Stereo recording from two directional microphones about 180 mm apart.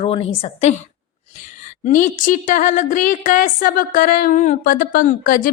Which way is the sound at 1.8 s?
45° left (ahead or behind).